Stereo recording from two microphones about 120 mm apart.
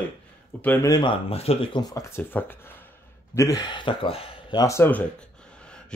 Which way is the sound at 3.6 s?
45° left (ahead or behind).